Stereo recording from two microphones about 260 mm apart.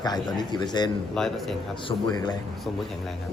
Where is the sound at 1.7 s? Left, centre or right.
Centre.